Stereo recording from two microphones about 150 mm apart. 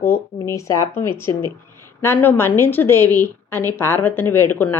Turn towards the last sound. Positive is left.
turn(degrees=15)  # may be behind; listen again after turning